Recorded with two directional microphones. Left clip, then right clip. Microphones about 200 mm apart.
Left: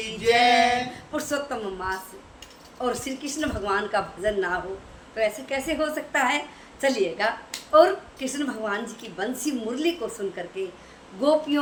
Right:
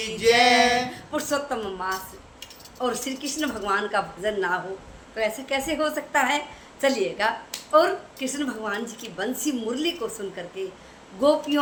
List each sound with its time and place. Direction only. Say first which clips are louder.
0.2 s female singing: right 2 dB; 55° right (ahead or behind)
1.1 s a woman's voice: right 2 dB; 5° right (ahead or behind)